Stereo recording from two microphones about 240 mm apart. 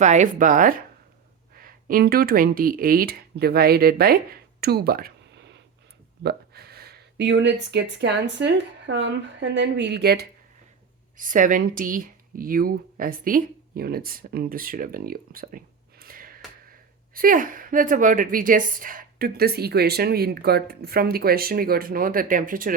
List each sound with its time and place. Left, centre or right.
0.0 s a woman's voice: right